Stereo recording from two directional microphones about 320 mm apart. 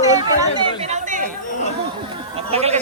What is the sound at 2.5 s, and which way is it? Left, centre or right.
Speech, centre.